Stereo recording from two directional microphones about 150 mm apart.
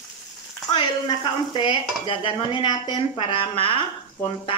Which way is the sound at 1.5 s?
35° left (ahead or behind).